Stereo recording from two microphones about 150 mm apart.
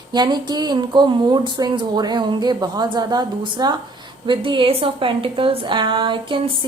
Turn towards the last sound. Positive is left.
turn(degrees=-35)  # may be behind; listen again after turning